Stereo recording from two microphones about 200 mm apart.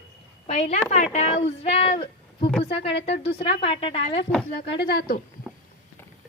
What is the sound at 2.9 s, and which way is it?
Speech, 60° left (ahead or behind).